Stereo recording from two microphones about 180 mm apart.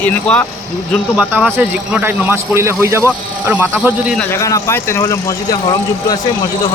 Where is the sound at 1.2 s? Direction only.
10° right (ahead or behind).